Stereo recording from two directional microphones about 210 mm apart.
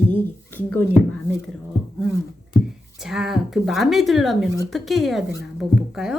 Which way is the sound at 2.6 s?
Centre (ahead or behind).